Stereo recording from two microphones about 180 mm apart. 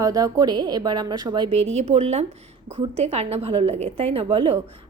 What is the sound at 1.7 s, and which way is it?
A woman's voice, 35° right (ahead or behind).